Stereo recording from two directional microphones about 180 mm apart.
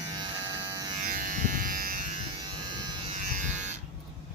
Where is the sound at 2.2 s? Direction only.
25° right (ahead or behind).